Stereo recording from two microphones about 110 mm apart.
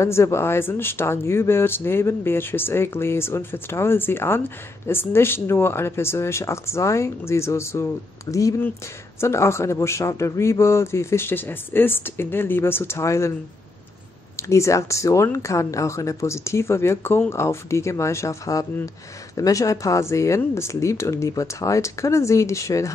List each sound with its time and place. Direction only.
0.0 s speech: 25° left (ahead or behind)
14.3 s speech: 25° left (ahead or behind)